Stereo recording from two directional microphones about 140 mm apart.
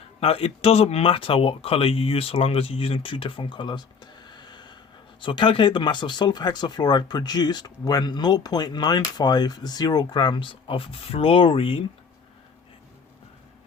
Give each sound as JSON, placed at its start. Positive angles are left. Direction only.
{"t": 0.2, "sound": "speech", "side_deg": 45}